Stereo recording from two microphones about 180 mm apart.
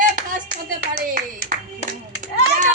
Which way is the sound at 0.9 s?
55° right (ahead or behind).